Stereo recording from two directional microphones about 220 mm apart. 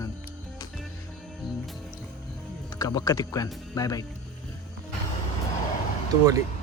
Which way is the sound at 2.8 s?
15° left (ahead or behind).